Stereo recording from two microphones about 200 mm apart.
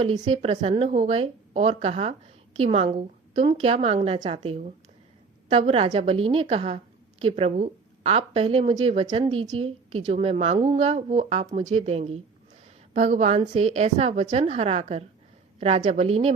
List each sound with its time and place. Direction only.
0.0 s a woman's voice: 30° right (ahead or behind)